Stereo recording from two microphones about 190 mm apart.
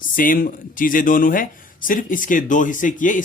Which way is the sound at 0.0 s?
45° left (ahead or behind).